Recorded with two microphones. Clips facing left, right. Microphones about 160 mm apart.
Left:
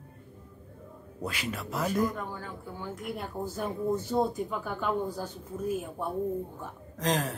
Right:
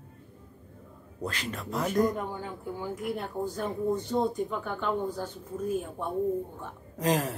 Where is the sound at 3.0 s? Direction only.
Centre (ahead or behind).